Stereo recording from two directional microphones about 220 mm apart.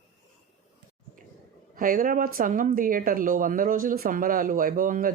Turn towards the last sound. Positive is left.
turn(degrees=-40)  # may be behind; listen again after turning